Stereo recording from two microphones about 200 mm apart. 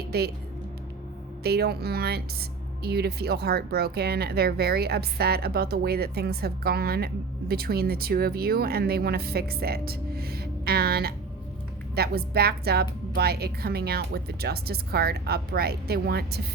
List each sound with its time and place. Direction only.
0.1 s speech: 50° right (ahead or behind)
1.5 s speech: 50° right (ahead or behind)